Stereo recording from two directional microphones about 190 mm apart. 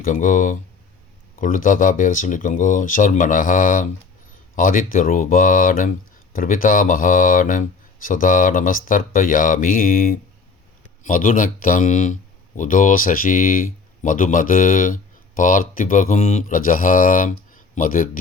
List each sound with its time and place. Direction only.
0.0 s speech: 45° left (ahead or behind)